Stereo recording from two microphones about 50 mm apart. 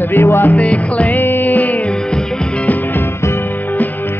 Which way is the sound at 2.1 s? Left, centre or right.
Centre.